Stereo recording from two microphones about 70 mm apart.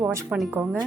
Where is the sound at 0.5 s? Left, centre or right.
Right.